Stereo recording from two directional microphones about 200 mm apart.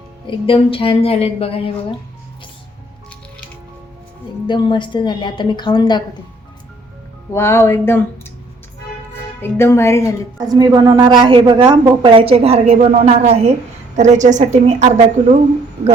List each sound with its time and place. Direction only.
0.3 s a woman's voice: 25° left (ahead or behind)
4.4 s a woman's voice: 25° left (ahead or behind)
7.3 s speech: 10° left (ahead or behind)
9.4 s speech: 10° left (ahead or behind)
10.4 s a woman's voice: 20° right (ahead or behind); by 15.4 s 35° right (ahead or behind)